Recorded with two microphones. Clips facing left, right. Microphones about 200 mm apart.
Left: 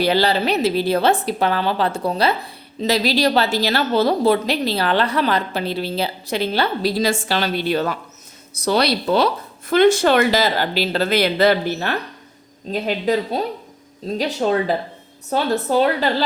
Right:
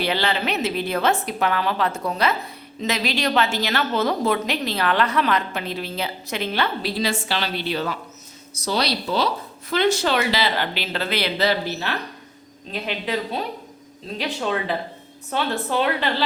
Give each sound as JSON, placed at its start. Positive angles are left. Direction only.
{"t": 0.0, "sound": "a woman's voice", "side_deg": 40}